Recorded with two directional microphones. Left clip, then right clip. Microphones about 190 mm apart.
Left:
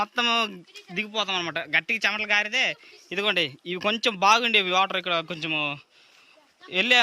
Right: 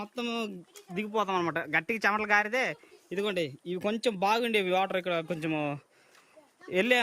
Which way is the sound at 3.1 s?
5° right (ahead or behind).